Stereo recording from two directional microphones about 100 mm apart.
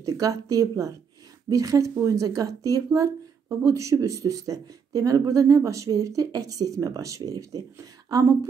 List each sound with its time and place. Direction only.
0.0 s speech: 35° right (ahead or behind)